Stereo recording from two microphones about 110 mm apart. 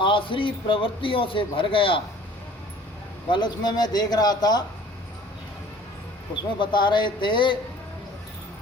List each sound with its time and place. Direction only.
0.0 s a man's voice: 50° left (ahead or behind)
3.2 s a man's voice: 45° left (ahead or behind)
6.6 s a man's voice: 45° left (ahead or behind)